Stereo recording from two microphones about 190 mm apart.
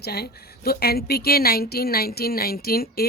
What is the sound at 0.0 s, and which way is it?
A woman's voice, 55° left (ahead or behind).